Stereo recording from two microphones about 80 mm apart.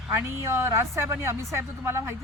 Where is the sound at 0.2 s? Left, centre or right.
Right.